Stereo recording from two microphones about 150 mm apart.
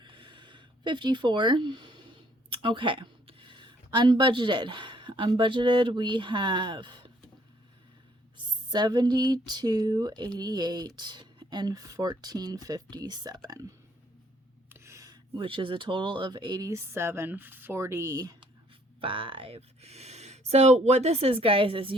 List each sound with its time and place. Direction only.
0.0 s speech: 30° right (ahead or behind)
8.7 s speech: 30° right (ahead or behind)
14.7 s a sound: 20° right (ahead or behind)
15.4 s speech: 35° right (ahead or behind)
18.9 s speech: 35° right (ahead or behind)